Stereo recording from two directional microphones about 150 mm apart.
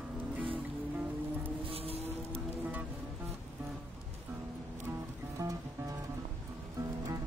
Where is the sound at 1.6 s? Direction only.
40° right (ahead or behind).